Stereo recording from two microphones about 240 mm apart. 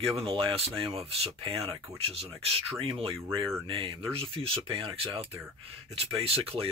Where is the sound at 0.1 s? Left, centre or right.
Right.